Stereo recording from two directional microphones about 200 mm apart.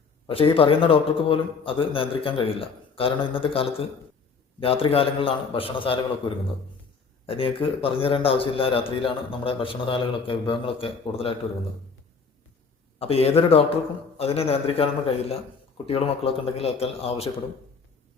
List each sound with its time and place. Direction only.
0.3 s a man's voice: 30° left (ahead or behind)
13.0 s a man's voice: 30° left (ahead or behind)
15.9 s a man's voice: 30° left (ahead or behind)